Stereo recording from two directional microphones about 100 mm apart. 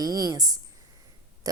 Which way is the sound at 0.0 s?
35° right (ahead or behind).